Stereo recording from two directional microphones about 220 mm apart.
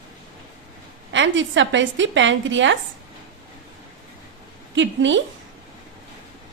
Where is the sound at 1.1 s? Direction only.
55° right (ahead or behind).